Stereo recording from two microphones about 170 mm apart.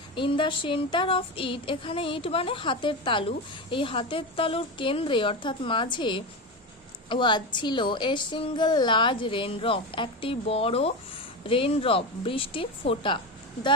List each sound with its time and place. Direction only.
0.2 s child singing: 30° left (ahead or behind)
7.1 s a woman's voice: 25° left (ahead or behind)
11.4 s child singing: 30° left (ahead or behind)